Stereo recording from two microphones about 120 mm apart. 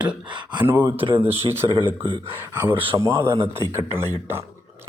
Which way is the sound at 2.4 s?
20° right (ahead or behind).